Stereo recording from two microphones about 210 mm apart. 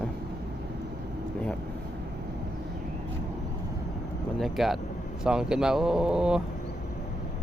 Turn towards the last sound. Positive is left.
turn(degrees=-5)  # may be behind; listen again after turning